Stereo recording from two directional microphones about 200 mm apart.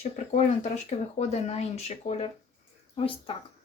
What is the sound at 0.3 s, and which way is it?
Speech, 35° left (ahead or behind).